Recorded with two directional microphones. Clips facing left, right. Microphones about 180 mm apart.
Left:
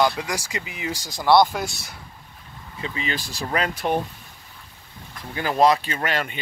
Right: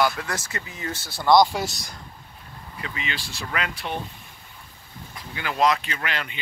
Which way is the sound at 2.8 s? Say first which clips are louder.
Left 4 dB; 30° left (ahead or behind).